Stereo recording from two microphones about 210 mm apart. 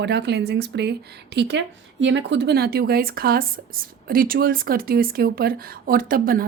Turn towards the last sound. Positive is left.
turn(degrees=-45)  # may be behind; listen again after turning